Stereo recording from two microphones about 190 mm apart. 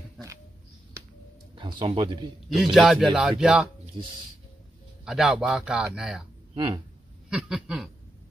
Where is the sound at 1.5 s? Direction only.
25° right (ahead or behind).